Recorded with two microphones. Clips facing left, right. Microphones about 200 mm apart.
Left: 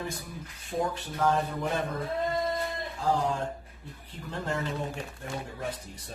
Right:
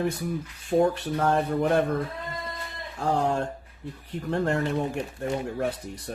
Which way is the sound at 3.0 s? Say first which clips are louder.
Right 4 dB; 65° right (ahead or behind).